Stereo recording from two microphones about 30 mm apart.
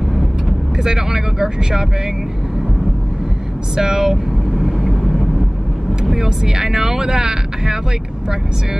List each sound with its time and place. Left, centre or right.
0.5 s speech: centre
3.7 s speech: centre
4.6 s vehicle: centre
6.1 s speech: centre